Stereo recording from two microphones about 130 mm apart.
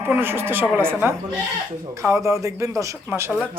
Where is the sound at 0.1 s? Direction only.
15° right (ahead or behind).